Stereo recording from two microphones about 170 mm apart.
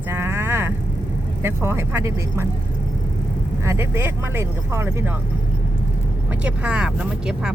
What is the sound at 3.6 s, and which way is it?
Speech, 15° right (ahead or behind).